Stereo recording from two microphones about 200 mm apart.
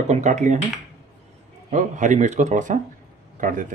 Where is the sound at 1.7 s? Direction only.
40° right (ahead or behind).